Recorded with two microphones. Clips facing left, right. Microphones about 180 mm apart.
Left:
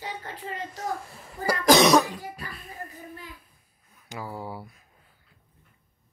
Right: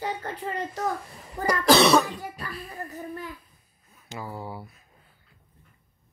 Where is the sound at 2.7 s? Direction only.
45° right (ahead or behind).